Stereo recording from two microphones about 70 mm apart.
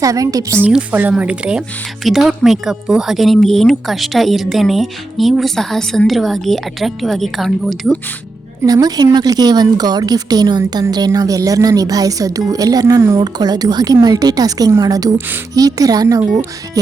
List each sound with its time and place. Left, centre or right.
0.0 s a woman's voice: right
0.9 s speech: right
2.0 s speech: centre
8.6 s a woman's voice: right